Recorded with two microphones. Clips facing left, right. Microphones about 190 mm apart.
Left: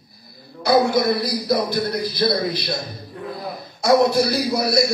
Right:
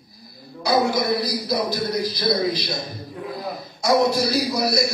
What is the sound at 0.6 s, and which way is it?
Speech, 55° left (ahead or behind).